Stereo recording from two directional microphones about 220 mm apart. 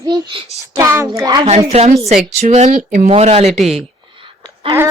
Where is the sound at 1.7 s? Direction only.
30° right (ahead or behind).